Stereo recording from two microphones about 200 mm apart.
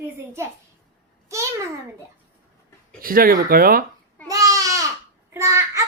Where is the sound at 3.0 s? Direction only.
45° right (ahead or behind).